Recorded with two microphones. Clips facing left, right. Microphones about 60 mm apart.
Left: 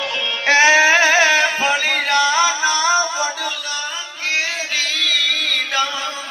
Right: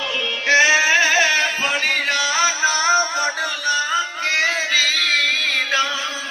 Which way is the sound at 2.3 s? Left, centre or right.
Right.